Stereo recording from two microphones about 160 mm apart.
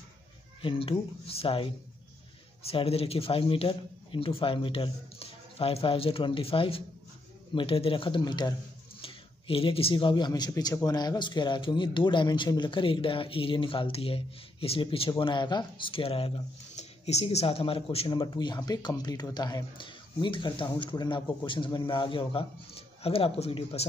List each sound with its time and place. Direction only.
0.6 s speech: 35° left (ahead or behind)